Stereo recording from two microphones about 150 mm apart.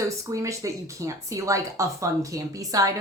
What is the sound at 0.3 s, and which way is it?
Speech, 20° right (ahead or behind).